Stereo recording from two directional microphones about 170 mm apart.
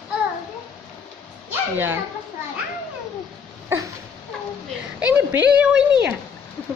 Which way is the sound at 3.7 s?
15° right (ahead or behind).